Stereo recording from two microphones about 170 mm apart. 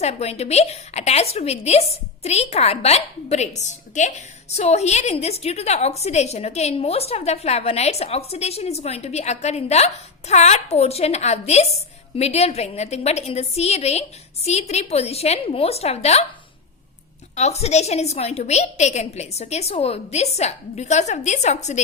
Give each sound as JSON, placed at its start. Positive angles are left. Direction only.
{"t": 0.0, "sound": "a woman's voice", "side_deg": 40}
{"t": 17.3, "sound": "a woman's voice", "side_deg": 40}